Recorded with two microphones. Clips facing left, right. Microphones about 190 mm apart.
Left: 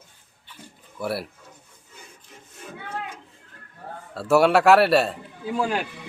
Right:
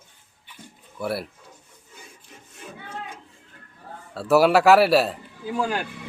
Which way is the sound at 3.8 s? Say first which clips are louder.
Left 4 dB; 60° left (ahead or behind).